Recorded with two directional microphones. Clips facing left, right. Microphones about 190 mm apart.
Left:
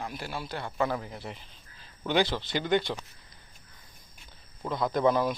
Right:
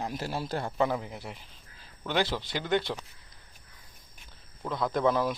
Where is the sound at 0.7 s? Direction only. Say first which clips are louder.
Right 1 dB; 25° right (ahead or behind).